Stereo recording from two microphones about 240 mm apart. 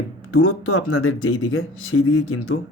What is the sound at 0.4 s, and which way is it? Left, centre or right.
Speech, left.